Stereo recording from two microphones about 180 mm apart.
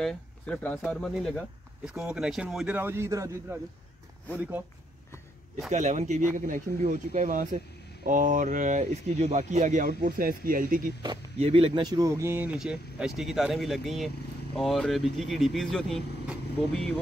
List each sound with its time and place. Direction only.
0.0 s speech: 5° left (ahead or behind); by 4.6 s 10° right (ahead or behind)
5.7 s speech: 40° right (ahead or behind)
11.3 s speech: 30° right (ahead or behind); by 16.9 s 5° left (ahead or behind)